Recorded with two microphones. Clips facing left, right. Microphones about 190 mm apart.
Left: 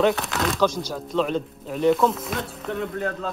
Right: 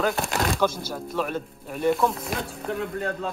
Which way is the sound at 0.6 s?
5° right (ahead or behind).